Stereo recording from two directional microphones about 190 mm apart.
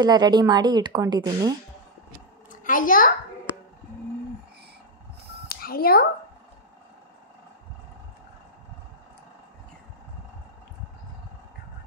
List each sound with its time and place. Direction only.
0.0 s speech: 20° right (ahead or behind)
2.6 s a child's voice: 45° left (ahead or behind)
5.5 s speech: 50° left (ahead or behind)